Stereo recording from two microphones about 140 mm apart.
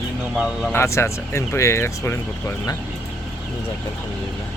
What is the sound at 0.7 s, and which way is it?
Speech, 20° left (ahead or behind).